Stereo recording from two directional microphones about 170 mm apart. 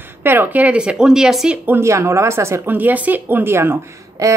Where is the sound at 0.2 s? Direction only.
10° right (ahead or behind).